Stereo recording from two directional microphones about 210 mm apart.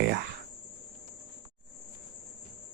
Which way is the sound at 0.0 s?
50° right (ahead or behind).